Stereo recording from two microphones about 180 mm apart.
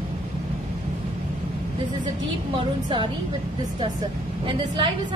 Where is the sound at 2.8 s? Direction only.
25° right (ahead or behind).